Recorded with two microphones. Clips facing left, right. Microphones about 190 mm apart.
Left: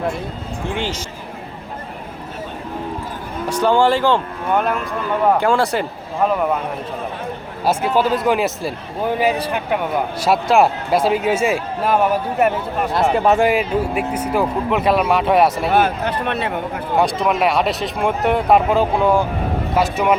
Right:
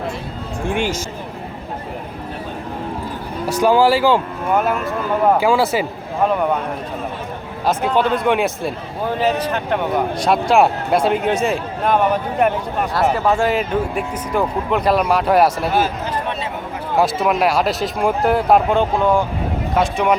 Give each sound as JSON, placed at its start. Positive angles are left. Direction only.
{"t": 0.7, "sound": "speech", "side_deg": -10}
{"t": 3.4, "sound": "speech", "side_deg": -10}
{"t": 7.6, "sound": "speech", "side_deg": 10}
{"t": 9.0, "sound": "speech", "side_deg": 10}
{"t": 13.2, "sound": "speech", "side_deg": 15}
{"t": 15.7, "sound": "speech", "side_deg": 60}
{"t": 17.0, "sound": "speech", "side_deg": 0}